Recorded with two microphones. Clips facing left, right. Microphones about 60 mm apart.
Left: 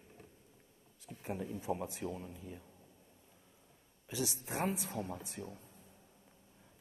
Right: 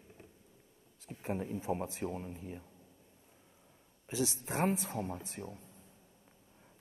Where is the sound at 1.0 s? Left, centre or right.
Right.